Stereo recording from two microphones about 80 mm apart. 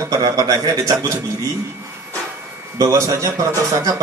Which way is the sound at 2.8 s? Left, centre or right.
Right.